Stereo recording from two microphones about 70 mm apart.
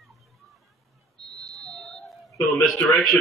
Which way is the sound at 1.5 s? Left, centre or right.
Centre.